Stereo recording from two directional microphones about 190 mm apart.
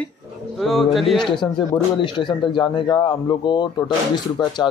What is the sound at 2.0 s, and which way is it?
Speech, 25° left (ahead or behind).